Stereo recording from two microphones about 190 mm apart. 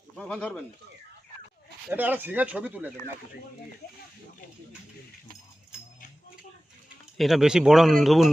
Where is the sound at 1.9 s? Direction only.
10° right (ahead or behind).